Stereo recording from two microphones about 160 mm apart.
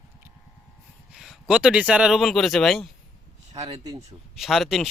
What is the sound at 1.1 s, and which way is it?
Speech, 5° right (ahead or behind).